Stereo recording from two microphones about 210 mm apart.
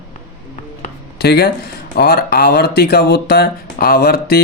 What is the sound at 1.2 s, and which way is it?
Speech, 50° left (ahead or behind).